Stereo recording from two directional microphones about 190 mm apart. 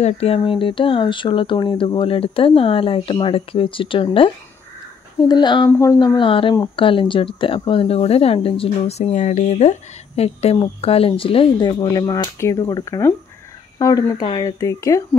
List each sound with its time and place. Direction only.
0.0 s speech: 30° left (ahead or behind)
5.3 s speech: 25° left (ahead or behind)